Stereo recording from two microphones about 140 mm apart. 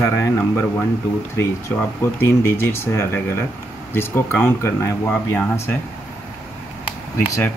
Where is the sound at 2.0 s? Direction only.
15° left (ahead or behind).